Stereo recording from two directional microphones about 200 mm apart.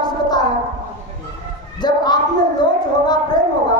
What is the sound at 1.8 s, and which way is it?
Speech, 20° left (ahead or behind).